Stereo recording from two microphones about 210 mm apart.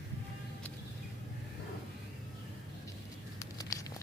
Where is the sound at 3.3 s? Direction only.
15° left (ahead or behind).